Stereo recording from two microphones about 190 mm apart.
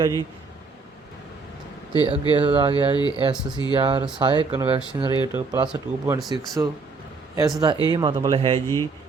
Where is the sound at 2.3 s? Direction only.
25° right (ahead or behind).